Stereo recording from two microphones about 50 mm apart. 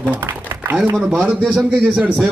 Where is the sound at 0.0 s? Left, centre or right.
Right.